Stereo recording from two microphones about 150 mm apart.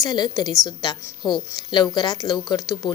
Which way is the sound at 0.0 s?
25° left (ahead or behind).